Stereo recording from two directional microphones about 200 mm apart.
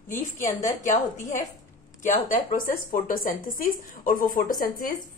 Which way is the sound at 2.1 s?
40° left (ahead or behind).